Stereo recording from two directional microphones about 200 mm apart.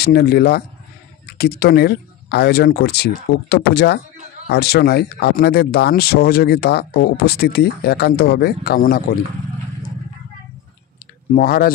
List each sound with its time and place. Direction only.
0.0 s speech: 50° left (ahead or behind)
11.3 s speech: 50° left (ahead or behind)